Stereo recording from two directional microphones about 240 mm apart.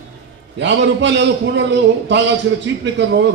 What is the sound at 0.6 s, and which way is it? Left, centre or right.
A man's voice, right.